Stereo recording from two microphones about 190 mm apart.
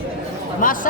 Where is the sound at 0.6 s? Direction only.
45° left (ahead or behind).